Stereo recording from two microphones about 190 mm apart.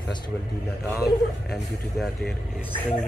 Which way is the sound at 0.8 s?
Centre (ahead or behind).